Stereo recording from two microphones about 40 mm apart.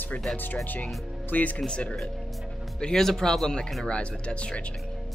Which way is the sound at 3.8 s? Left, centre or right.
Left.